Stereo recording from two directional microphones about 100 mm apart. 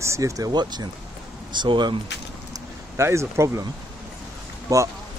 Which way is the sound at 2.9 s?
30° right (ahead or behind).